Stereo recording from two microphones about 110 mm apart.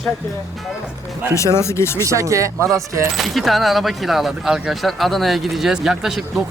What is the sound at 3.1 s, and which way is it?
Speech, centre (ahead or behind).